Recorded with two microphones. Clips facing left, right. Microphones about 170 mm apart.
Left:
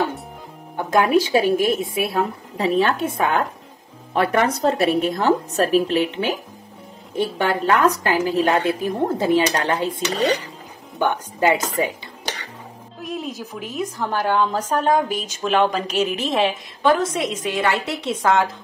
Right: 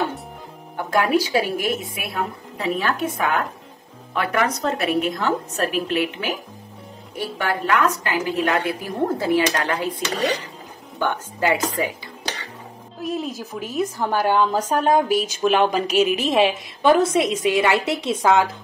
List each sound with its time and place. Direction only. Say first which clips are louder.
0.7 s a woman's voice: left 2 dB; 20° left (ahead or behind)
13.0 s a woman's voice: right 2 dB; centre (ahead or behind)